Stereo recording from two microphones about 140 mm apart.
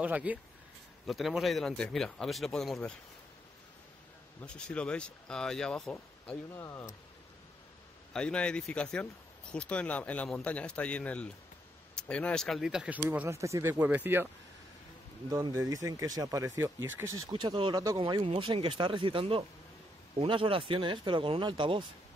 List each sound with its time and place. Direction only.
0.0 s speech: 10° right (ahead or behind)
1.0 s speech: centre (ahead or behind)
4.5 s speech: 5° left (ahead or behind)
6.5 s speech: 15° left (ahead or behind)
8.1 s speech: 5° left (ahead or behind); by 14.3 s 15° right (ahead or behind)
15.2 s speech: 25° right (ahead or behind)
17.3 s speech: 35° right (ahead or behind)